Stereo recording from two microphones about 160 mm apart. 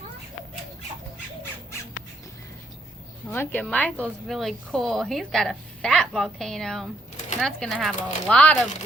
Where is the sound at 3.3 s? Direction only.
15° left (ahead or behind).